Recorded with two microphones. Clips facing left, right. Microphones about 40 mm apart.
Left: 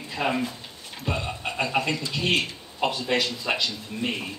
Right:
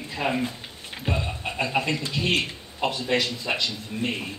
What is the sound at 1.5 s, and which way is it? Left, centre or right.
A man's voice, centre.